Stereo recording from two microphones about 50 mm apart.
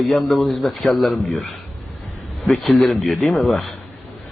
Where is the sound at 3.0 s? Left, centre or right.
Centre.